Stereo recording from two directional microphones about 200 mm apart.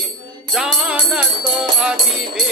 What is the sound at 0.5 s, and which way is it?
Music, 5° right (ahead or behind).